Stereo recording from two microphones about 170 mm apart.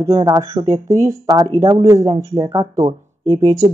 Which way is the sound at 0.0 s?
20° right (ahead or behind).